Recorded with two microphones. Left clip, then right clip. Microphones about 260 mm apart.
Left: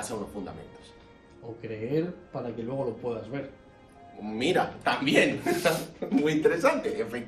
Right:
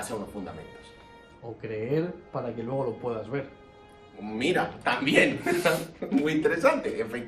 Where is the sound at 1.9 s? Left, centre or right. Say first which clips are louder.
Even; centre.